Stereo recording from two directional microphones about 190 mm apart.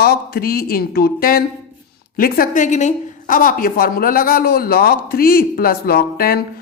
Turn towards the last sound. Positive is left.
turn(degrees=50)  # may be behind; listen again after turning